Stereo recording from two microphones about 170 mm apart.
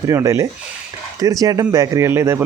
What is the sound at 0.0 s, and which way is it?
Speech, 20° right (ahead or behind).